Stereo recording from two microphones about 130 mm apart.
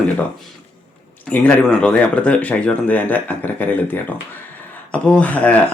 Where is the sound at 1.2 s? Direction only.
10° left (ahead or behind).